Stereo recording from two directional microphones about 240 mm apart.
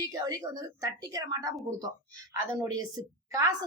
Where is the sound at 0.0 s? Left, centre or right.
Centre.